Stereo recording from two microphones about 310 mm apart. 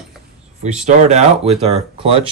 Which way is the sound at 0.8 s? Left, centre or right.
Right.